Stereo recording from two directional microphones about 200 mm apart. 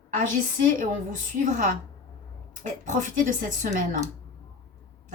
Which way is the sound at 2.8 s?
40° right (ahead or behind).